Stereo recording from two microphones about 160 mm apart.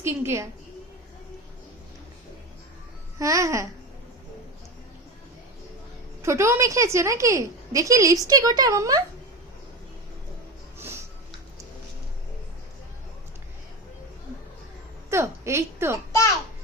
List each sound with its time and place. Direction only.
0.0 s a woman's voice: 15° right (ahead or behind)
3.2 s a woman's voice: 20° right (ahead or behind)
6.2 s a woman's voice: 15° right (ahead or behind)
10.8 s a sound: 15° right (ahead or behind)
15.1 s a woman's voice: 15° right (ahead or behind)